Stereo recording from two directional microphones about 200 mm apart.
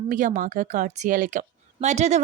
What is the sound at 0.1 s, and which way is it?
Speech, 40° right (ahead or behind).